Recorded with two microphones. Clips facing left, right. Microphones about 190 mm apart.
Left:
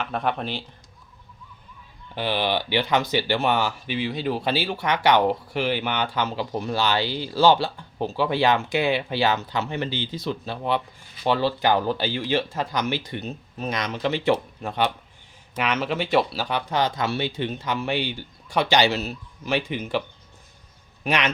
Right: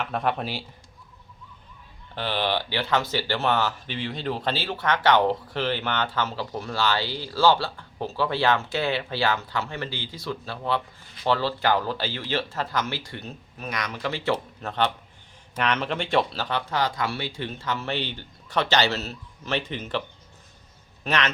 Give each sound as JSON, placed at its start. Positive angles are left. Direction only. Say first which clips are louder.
{"t": 0.0, "sound": "speech", "louder": "even", "side_deg": 0}
{"t": 2.1, "sound": "speech", "louder": "left 2 dB", "side_deg": 10}
{"t": 21.0, "sound": "a man's voice", "louder": "left 2 dB", "side_deg": 15}